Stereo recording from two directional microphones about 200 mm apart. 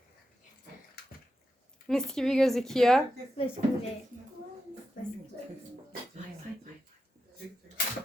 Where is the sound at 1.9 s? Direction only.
Centre (ahead or behind).